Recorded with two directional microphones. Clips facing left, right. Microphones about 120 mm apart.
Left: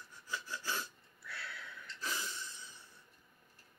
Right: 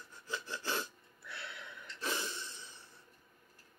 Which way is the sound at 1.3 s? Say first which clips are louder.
Even; 25° right (ahead or behind).